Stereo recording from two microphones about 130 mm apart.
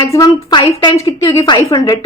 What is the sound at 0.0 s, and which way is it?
A woman's voice, 30° left (ahead or behind).